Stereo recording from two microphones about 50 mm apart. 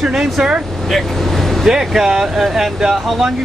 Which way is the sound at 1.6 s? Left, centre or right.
Centre.